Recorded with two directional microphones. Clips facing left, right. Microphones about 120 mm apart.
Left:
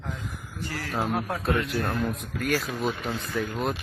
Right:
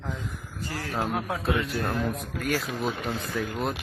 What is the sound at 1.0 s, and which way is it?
Speech, centre (ahead or behind).